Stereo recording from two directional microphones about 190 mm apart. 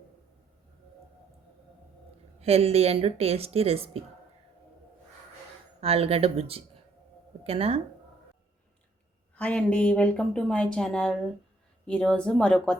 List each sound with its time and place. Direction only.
2.4 s speech: 30° right (ahead or behind)
5.8 s speech: 30° right (ahead or behind)
9.3 s speech: 5° left (ahead or behind)